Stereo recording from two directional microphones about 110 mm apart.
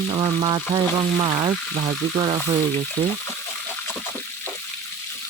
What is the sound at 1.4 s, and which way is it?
Speech, 65° right (ahead or behind).